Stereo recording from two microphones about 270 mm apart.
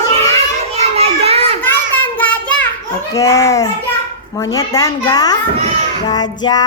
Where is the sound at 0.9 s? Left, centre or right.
Right.